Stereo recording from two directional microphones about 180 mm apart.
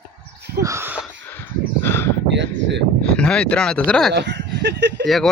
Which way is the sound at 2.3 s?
80° right.